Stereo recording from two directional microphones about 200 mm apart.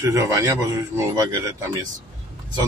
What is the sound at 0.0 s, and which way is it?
Speech, 15° right (ahead or behind).